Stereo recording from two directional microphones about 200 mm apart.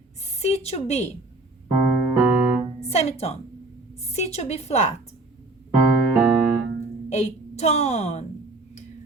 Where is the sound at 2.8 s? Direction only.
35° left (ahead or behind).